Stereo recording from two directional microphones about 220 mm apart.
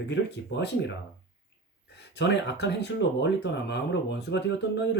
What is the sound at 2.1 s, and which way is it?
Speech, 50° left (ahead or behind).